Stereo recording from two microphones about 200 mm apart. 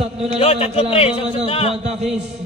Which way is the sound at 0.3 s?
30° left (ahead or behind).